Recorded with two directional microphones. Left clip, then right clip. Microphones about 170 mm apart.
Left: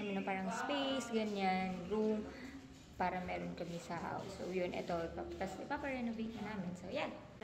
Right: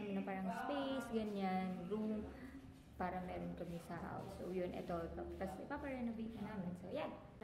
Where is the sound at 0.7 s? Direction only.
Centre (ahead or behind).